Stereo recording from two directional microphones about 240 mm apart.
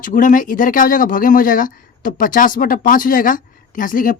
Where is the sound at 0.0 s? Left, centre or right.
Left.